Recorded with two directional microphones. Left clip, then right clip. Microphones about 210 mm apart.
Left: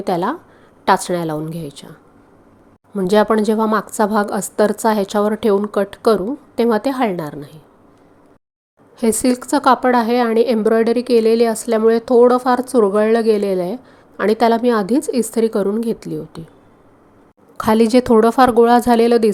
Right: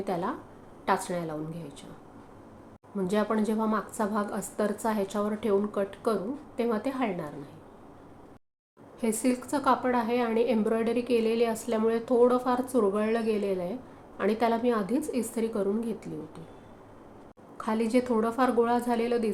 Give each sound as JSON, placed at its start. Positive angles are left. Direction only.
{"t": 0.0, "sound": "a woman's voice", "side_deg": 45}
{"t": 2.9, "sound": "a woman's voice", "side_deg": 40}
{"t": 9.0, "sound": "a woman's voice", "side_deg": 40}
{"t": 17.6, "sound": "a woman's voice", "side_deg": 45}